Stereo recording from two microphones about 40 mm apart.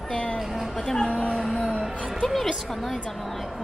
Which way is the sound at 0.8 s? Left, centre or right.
Centre.